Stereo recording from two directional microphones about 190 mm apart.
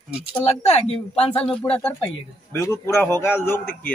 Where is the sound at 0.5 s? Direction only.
35° left (ahead or behind).